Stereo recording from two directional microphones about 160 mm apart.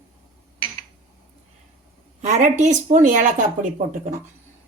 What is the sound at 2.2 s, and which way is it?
Speech, 45° right (ahead or behind).